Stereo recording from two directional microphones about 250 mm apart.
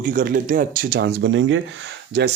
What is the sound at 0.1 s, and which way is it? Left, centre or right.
Speech, right.